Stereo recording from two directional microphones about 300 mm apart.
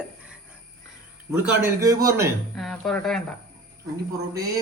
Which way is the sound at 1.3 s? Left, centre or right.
Centre.